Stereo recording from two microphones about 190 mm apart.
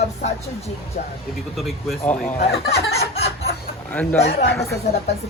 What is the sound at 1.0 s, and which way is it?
Speech, 45° left (ahead or behind).